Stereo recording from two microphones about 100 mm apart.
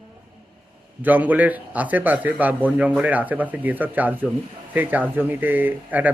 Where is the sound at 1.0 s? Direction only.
15° right (ahead or behind).